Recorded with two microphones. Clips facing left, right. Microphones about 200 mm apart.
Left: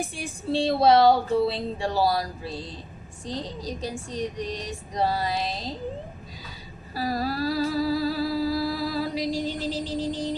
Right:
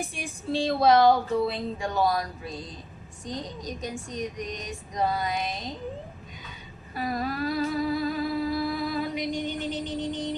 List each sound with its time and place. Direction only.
0.1 s speech: 30° left (ahead or behind)
7.0 s music: 35° left (ahead or behind)
9.7 s music: centre (ahead or behind)